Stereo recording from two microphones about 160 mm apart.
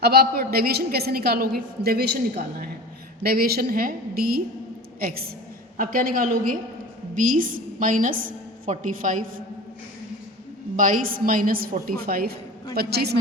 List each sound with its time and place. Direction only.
0.0 s a woman's voice: 80° right
3.2 s a woman's voice: 70° right (ahead or behind)
10.8 s a woman's voice: 55° right (ahead or behind)
12.7 s a woman's voice: 85° right